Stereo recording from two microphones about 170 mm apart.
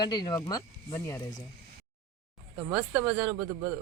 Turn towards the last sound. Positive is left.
turn(degrees=-15)  # may be behind; listen again after turning